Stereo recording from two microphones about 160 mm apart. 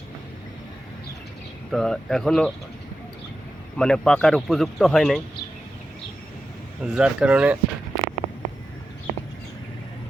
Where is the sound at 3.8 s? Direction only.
5° left (ahead or behind).